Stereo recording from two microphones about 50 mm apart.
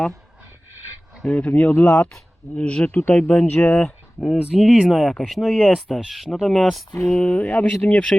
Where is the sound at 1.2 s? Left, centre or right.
Left.